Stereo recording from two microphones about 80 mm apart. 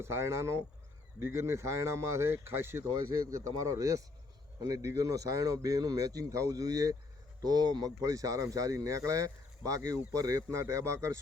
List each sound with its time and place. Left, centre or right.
0.0 s speech: right
3.2 s speech: right